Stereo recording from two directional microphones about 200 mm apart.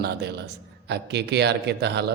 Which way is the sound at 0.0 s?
55° right (ahead or behind).